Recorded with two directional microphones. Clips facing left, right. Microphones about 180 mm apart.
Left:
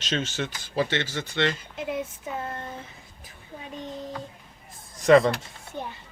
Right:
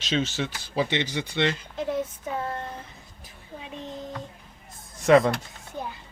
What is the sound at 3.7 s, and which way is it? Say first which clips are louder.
Speech: left 1 dB; centre (ahead or behind).